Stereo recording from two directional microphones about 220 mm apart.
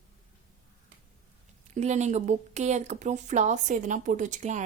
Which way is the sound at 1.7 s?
30° right (ahead or behind).